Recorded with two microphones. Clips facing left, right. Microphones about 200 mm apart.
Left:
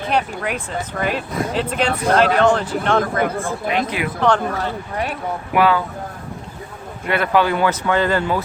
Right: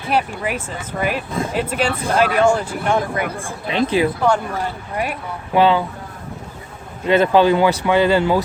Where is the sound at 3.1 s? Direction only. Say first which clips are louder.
Left 4 dB; 50° left (ahead or behind).